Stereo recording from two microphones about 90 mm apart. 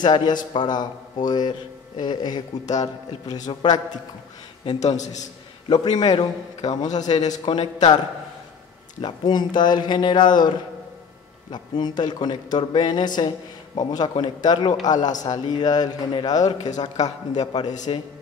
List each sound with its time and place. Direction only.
0.0 s a man's voice: 55° left (ahead or behind)
5.7 s a man's voice: 50° left (ahead or behind)
9.0 s speech: 55° left (ahead or behind)
11.5 s a man's voice: 55° left (ahead or behind)
17.9 s a man's voice: 75° left (ahead or behind)